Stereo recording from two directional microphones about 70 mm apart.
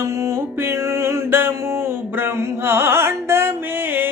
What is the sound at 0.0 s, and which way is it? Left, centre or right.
Music, right.